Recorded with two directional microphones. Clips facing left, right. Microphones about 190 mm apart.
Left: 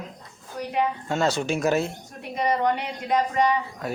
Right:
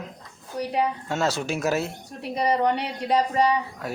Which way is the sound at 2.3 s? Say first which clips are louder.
Right 1 dB; 35° right (ahead or behind).